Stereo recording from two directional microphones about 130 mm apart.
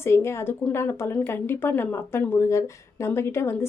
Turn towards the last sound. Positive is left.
turn(degrees=20)  # may be behind; listen again after turning